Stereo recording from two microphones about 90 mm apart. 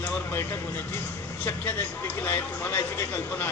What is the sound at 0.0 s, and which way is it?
A man's voice, 20° left (ahead or behind).